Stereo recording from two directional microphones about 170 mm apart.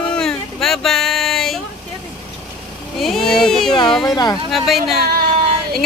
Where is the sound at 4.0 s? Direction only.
25° left (ahead or behind).